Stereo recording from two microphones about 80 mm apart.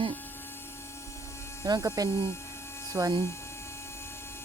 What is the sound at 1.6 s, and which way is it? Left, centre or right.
Speech, right.